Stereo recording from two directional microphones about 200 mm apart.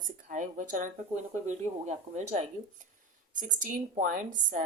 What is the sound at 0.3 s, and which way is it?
A woman's voice, 40° right (ahead or behind).